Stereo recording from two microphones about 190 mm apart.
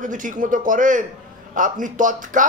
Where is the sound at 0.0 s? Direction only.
45° right (ahead or behind).